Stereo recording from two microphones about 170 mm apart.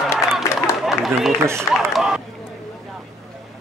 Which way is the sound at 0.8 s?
Centre (ahead or behind).